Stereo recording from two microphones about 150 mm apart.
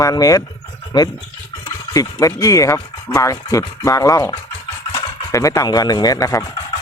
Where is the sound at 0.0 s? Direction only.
25° left (ahead or behind).